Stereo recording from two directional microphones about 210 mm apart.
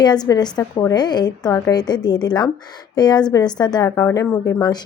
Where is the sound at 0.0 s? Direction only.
20° left (ahead or behind).